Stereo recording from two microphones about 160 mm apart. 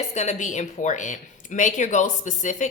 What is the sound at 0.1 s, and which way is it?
Speech, 45° left (ahead or behind).